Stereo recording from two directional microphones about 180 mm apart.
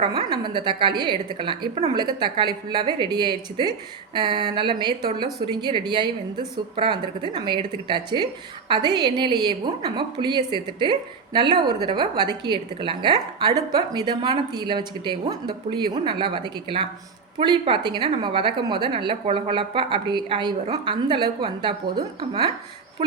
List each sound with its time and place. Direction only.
0.1 s a woman's voice: 25° right (ahead or behind)